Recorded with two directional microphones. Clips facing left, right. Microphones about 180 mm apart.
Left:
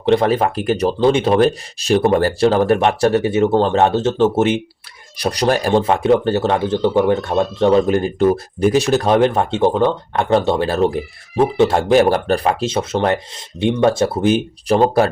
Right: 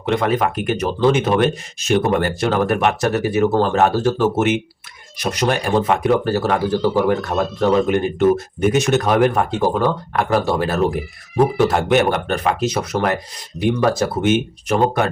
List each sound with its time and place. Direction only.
0.0 s speech: 30° left (ahead or behind)